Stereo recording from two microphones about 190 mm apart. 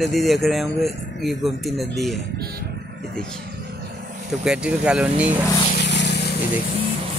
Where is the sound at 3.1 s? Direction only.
5° left (ahead or behind).